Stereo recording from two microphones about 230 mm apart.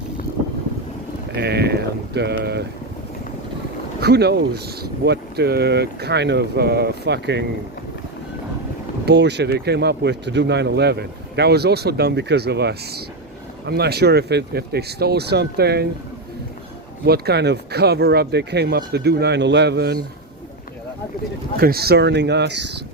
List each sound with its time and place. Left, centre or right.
1.4 s speech: right
4.0 s speech: right
9.0 s speech: right
17.1 s speech: right
21.6 s speech: right